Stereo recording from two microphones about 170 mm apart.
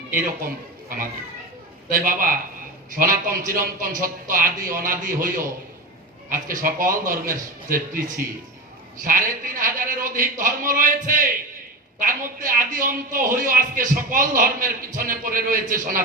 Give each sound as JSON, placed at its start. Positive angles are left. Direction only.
{"t": 0.1, "sound": "a man's voice", "side_deg": -55}